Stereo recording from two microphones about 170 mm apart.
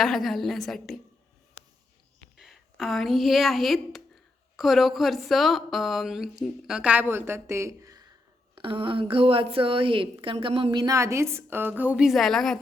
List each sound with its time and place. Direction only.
0.0 s a woman's voice: centre (ahead or behind)
2.4 s a woman's voice: centre (ahead or behind)